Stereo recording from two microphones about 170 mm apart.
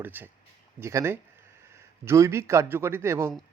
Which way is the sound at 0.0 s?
10° right (ahead or behind).